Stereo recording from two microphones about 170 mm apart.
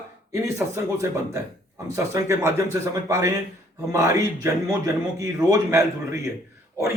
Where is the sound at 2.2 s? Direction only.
15° right (ahead or behind).